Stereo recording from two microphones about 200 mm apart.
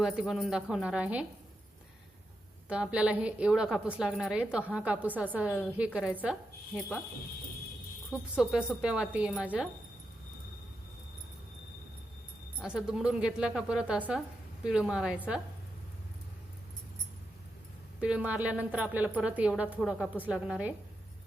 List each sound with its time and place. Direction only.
0.0 s a woman's voice: centre (ahead or behind)
2.6 s a woman's voice: 5° right (ahead or behind)
8.1 s a woman's voice: 5° right (ahead or behind)
12.5 s a woman's voice: 5° right (ahead or behind)
18.0 s a woman's voice: 5° right (ahead or behind)